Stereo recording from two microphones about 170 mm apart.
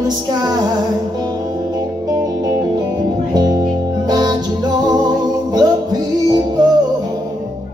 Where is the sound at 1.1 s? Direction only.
20° right (ahead or behind).